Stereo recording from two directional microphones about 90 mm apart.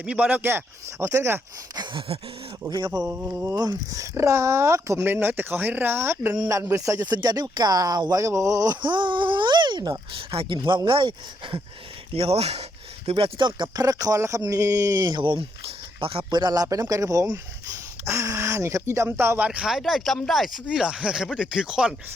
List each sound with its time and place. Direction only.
0.0 s speech: 10° right (ahead or behind); by 1.4 s 30° right (ahead or behind)
1.7 s speech: 60° right (ahead or behind)
2.6 s speech: 50° right (ahead or behind)
3.1 s speech: 20° right (ahead or behind)
3.5 s speech: 50° right (ahead or behind)
5.0 s speech: 20° right (ahead or behind)
7.0 s speech: 50° right (ahead or behind)
10.1 s speech: 75° right (ahead or behind)
12.2 s speech: 90° right
13.1 s speech: 75° right (ahead or behind); by 16.2 s 90° right
16.3 s speech: 50° right (ahead or behind); by 19.5 s 25° right (ahead or behind)
19.5 s speech: 10° right (ahead or behind)